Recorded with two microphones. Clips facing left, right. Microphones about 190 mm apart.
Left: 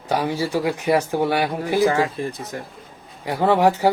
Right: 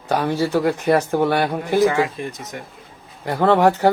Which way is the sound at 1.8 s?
35° left (ahead or behind).